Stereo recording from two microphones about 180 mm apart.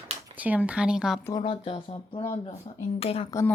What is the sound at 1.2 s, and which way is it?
Speech, 25° left (ahead or behind).